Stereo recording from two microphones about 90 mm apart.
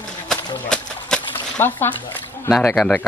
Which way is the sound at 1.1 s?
5° left (ahead or behind).